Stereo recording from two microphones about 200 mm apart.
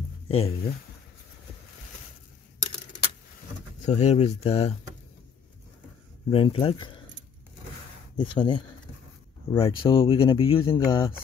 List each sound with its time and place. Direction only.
0.3 s speech: 30° left (ahead or behind)
3.8 s speech: 35° left (ahead or behind)
6.3 s speech: 25° left (ahead or behind)
8.2 s speech: 25° left (ahead or behind)